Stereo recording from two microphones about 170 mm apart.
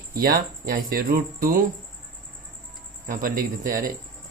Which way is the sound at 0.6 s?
55° right (ahead or behind).